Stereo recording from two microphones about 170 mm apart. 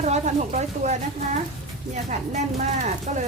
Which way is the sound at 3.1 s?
40° right (ahead or behind).